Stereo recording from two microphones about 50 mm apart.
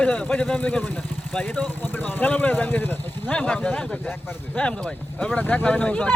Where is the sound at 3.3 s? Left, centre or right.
Left.